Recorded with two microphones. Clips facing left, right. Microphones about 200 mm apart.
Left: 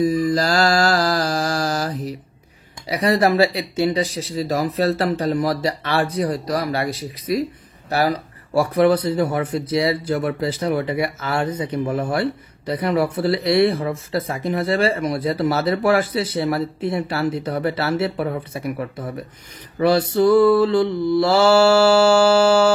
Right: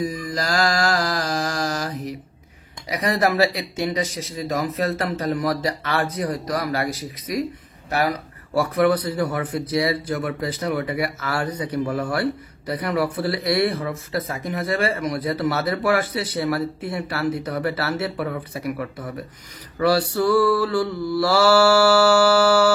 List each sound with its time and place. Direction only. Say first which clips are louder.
0.4 s mantra: left 4 dB; 35° left (ahead or behind)
2.9 s speech: left 4 dB; 30° left (ahead or behind)